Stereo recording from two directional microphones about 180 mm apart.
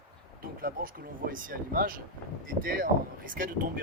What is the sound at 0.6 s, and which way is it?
Speech, 55° right (ahead or behind).